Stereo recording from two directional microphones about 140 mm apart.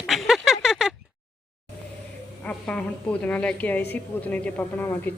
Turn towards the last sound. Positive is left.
turn(degrees=15)  # may be behind; listen again after turning